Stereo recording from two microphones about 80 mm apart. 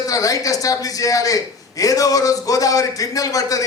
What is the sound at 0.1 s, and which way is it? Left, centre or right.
A man's voice, left.